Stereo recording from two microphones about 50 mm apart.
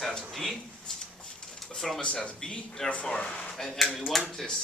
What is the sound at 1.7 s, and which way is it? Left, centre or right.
Speech, centre.